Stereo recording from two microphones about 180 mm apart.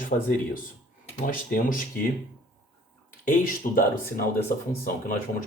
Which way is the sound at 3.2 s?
50° left (ahead or behind).